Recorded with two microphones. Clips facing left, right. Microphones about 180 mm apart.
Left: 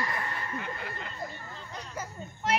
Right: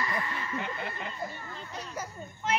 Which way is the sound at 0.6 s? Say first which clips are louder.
Right 2 dB; 20° right (ahead or behind).